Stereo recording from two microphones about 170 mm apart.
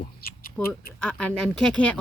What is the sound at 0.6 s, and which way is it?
A woman's voice, 5° left (ahead or behind).